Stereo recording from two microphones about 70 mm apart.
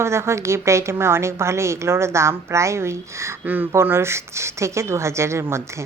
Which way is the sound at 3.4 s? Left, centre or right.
Right.